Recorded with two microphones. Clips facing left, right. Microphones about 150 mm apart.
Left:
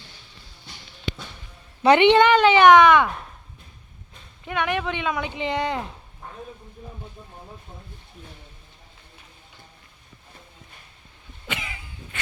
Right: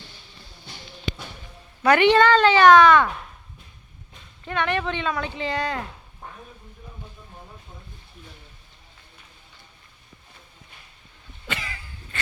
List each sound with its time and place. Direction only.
1.8 s speech: 20° left (ahead or behind)
4.4 s speech: 10° left (ahead or behind)
11.4 s cough: 15° left (ahead or behind)